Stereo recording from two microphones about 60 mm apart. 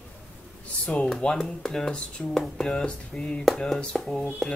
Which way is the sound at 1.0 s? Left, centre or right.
Centre.